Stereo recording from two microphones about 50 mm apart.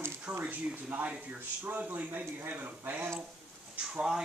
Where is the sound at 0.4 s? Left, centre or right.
Right.